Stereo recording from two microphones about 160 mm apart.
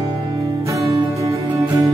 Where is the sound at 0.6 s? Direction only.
20° right (ahead or behind).